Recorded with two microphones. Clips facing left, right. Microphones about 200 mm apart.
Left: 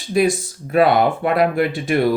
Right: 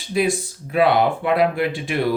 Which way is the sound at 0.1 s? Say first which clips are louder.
Left 3 dB; 45° left (ahead or behind).